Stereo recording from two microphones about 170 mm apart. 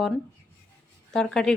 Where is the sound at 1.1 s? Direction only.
5° left (ahead or behind).